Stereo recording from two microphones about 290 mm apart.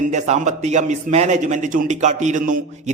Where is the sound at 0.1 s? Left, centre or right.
Right.